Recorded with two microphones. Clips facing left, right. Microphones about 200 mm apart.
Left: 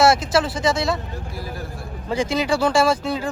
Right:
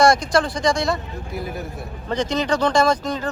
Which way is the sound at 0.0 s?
5° left (ahead or behind).